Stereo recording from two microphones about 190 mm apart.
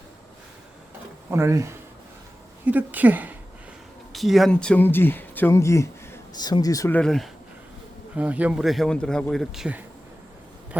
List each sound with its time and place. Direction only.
1.3 s a woman's voice: 15° right (ahead or behind); by 7.3 s 5° left (ahead or behind)
8.1 s speech: 5° right (ahead or behind)